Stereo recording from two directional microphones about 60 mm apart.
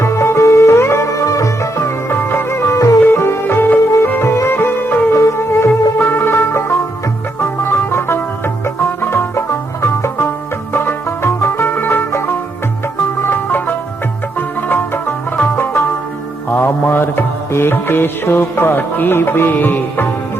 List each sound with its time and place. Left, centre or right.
0.0 s music: left
3.1 s music: left
4.2 s music: left
5.1 s music: left
10.7 s music: left
13.3 s music: left